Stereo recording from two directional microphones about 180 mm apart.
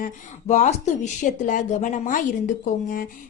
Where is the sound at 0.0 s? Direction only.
40° left (ahead or behind).